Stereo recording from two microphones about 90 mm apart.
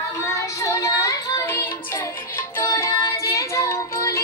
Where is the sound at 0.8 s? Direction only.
40° left (ahead or behind).